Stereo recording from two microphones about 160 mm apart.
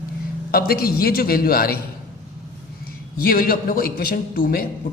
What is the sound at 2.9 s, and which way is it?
A man's voice, 70° left (ahead or behind).